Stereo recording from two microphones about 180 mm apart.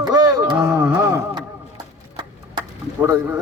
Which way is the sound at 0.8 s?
20° right (ahead or behind).